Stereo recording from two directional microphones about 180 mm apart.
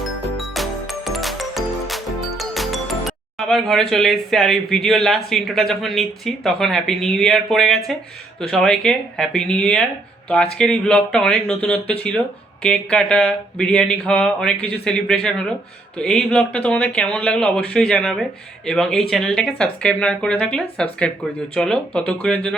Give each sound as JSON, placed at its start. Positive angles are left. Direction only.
{"t": 0.0, "sound": "music", "side_deg": 0}
{"t": 3.3, "sound": "speech", "side_deg": 0}